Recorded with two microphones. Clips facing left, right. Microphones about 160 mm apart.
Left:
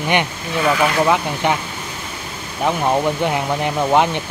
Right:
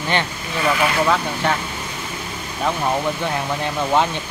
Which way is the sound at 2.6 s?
20° left (ahead or behind).